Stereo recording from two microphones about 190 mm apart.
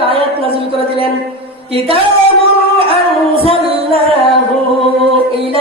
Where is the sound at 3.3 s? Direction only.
30° right (ahead or behind).